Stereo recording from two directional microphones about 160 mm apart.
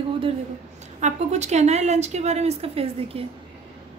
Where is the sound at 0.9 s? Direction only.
45° right (ahead or behind).